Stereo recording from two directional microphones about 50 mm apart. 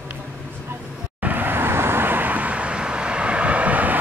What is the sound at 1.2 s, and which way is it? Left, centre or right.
Vehicle, right.